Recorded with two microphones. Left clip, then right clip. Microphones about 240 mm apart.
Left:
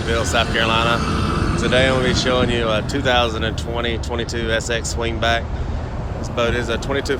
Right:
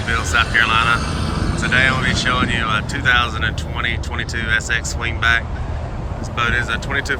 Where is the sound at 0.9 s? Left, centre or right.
Right.